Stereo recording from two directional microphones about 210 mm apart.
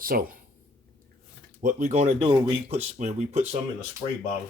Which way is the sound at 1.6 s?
40° right (ahead or behind).